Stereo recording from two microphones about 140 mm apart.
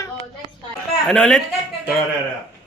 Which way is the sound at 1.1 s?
5° left (ahead or behind).